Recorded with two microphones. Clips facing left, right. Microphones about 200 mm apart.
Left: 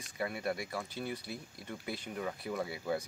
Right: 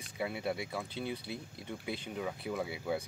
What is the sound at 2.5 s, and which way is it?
Speech, centre (ahead or behind).